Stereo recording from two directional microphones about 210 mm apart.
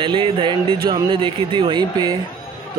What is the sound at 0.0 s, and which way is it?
Speech, 25° right (ahead or behind).